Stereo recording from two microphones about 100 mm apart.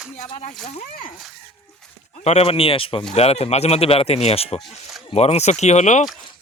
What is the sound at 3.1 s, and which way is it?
Speech, 90° left.